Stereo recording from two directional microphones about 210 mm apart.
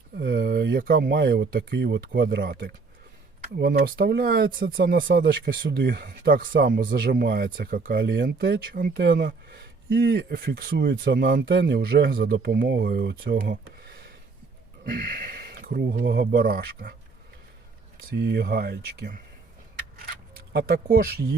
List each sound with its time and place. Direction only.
0.2 s speech: 55° right (ahead or behind)
11.4 s speech: 55° right (ahead or behind)
18.1 s speech: 50° right (ahead or behind)
20.1 s a sound: 50° right (ahead or behind)